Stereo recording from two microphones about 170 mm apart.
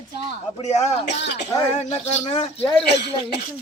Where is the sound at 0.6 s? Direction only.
40° left (ahead or behind).